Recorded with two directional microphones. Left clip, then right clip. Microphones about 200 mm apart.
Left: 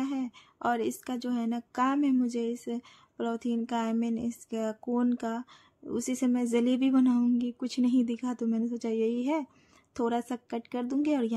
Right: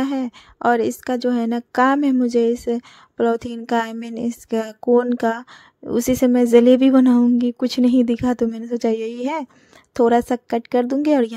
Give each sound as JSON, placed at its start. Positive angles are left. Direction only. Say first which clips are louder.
{"t": 0.0, "sound": "speech", "louder": "right 11 dB", "side_deg": -40}